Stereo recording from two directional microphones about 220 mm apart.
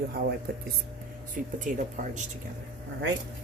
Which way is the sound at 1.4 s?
35° right (ahead or behind).